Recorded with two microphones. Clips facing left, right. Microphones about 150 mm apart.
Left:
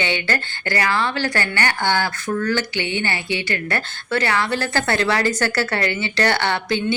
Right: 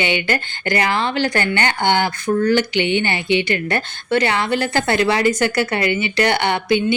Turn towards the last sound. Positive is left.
turn(degrees=-15)  # may be behind; listen again after turning